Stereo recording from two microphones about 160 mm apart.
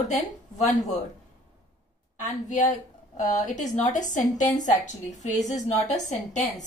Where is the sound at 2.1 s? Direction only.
50° left (ahead or behind).